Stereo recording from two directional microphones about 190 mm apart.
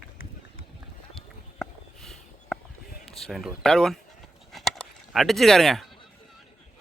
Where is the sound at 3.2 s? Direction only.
Centre (ahead or behind).